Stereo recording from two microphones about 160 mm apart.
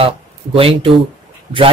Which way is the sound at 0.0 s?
35° right (ahead or behind).